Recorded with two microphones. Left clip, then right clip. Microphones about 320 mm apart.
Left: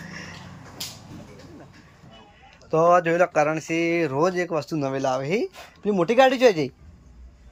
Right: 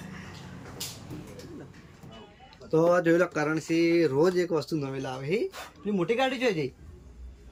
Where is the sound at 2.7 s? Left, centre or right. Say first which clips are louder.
Left 4 dB; centre.